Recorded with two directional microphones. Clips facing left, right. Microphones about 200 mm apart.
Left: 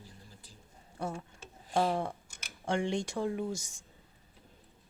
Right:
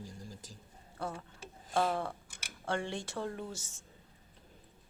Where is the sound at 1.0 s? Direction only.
15° left (ahead or behind).